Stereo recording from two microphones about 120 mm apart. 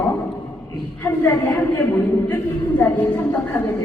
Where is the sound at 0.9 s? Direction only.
15° left (ahead or behind).